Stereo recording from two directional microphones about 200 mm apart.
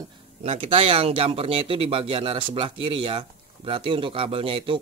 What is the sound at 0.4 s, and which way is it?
Speech, 30° right (ahead or behind).